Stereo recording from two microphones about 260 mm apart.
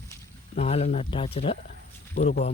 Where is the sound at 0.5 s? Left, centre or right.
Left.